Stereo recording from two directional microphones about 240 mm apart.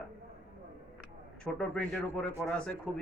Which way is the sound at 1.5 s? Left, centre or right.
Centre.